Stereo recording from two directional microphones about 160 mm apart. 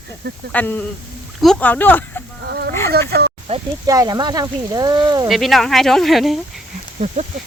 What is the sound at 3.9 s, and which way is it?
Speech, 20° right (ahead or behind).